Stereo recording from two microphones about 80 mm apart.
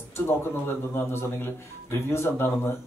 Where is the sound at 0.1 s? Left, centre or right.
Left.